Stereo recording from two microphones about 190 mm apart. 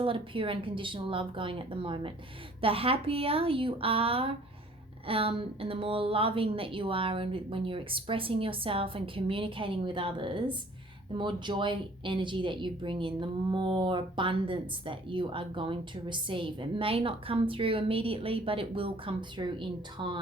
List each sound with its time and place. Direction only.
0.0 s speech: 30° right (ahead or behind)